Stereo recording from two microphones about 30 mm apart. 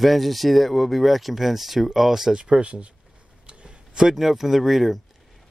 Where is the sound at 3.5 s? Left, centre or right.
Right.